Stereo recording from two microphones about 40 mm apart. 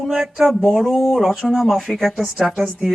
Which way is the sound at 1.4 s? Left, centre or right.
Centre.